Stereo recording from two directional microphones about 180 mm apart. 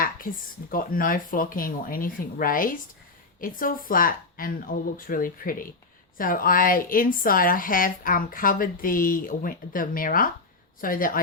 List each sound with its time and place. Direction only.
0.0 s speech: 50° left (ahead or behind)